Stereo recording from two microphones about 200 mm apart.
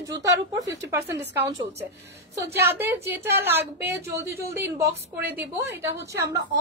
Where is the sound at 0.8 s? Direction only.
15° right (ahead or behind).